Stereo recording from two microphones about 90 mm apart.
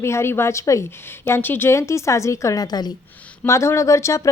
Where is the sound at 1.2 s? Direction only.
25° left (ahead or behind); by 2.9 s 50° left (ahead or behind).